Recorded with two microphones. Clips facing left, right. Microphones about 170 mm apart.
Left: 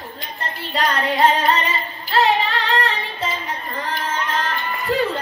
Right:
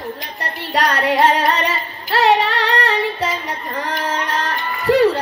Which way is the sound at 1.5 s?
70° right (ahead or behind).